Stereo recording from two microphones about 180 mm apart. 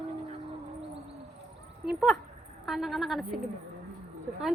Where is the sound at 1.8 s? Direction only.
Centre (ahead or behind).